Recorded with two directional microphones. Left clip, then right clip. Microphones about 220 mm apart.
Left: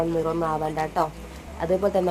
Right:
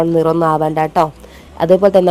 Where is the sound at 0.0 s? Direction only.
40° right (ahead or behind).